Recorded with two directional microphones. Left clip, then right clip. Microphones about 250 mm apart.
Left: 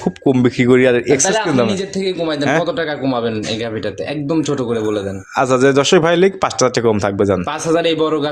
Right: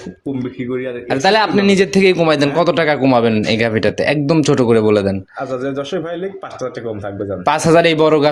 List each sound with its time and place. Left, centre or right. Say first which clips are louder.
0.4 s speech: left 12 dB; left
1.7 s a man's voice: right 8 dB; right
5.4 s a man's voice: left 11 dB; left
7.4 s a man's voice: right 5 dB; right